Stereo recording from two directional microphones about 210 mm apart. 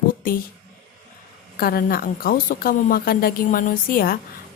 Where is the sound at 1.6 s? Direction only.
45° left (ahead or behind).